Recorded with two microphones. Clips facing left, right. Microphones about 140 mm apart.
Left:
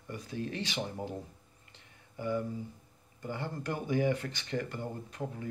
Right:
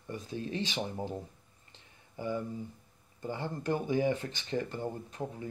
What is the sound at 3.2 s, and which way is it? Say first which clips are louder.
Speech: right 2 dB; 20° right (ahead or behind).